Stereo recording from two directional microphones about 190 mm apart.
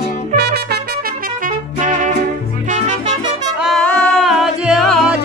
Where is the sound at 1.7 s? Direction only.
40° right (ahead or behind).